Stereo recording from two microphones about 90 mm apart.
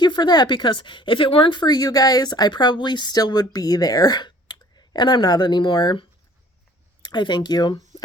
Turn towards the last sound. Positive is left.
turn(degrees=50)  # may be behind; listen again after turning